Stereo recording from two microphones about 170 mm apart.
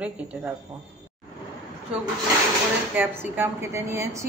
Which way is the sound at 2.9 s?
10° right (ahead or behind).